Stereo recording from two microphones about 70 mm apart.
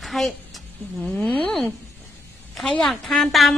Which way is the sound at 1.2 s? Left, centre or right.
Left.